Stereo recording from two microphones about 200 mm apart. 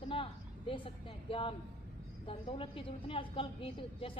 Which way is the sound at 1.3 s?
25° left (ahead or behind).